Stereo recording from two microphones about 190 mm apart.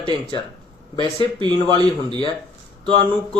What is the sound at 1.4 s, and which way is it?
Speech, 20° right (ahead or behind).